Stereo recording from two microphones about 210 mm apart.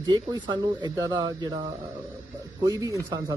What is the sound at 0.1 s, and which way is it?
Speech, 20° right (ahead or behind).